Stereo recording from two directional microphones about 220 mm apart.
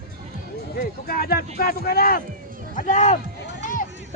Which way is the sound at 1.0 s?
45° left (ahead or behind).